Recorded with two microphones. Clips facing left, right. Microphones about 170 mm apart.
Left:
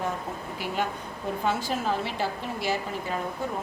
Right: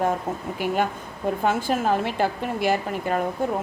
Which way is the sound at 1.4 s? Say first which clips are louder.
Right 5 dB; 55° right (ahead or behind).